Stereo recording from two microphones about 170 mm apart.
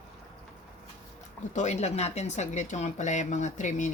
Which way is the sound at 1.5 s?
40° left (ahead or behind).